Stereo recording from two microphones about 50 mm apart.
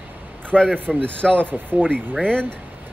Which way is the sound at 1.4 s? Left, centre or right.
Right.